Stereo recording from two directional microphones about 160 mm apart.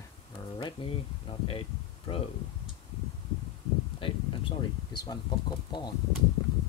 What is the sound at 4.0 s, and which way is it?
Speech, 30° left (ahead or behind).